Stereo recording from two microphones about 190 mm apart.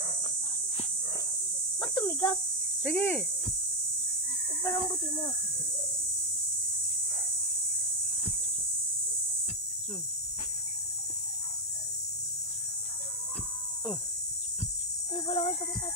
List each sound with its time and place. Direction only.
1.8 s a sound: 25° left (ahead or behind)
2.8 s speech: 5° left (ahead or behind)
4.6 s speech: 20° left (ahead or behind)
15.2 s speech: 30° left (ahead or behind)